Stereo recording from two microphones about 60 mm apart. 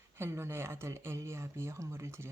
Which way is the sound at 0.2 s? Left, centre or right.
Right.